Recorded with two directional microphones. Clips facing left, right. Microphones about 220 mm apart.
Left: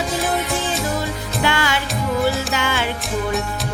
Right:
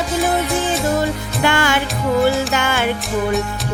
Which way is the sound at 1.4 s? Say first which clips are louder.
Right 4 dB; 50° right (ahead or behind).